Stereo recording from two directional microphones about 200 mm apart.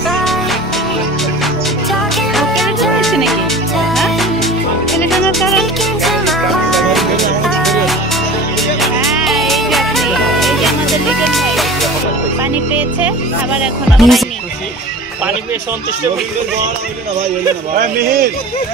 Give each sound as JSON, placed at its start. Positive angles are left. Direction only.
{"t": 2.3, "sound": "music", "side_deg": 0}
{"t": 13.9, "sound": "speech", "side_deg": 0}
{"t": 17.7, "sound": "speech", "side_deg": -45}